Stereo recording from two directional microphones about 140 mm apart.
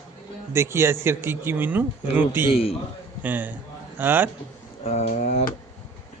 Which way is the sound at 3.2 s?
10° right (ahead or behind).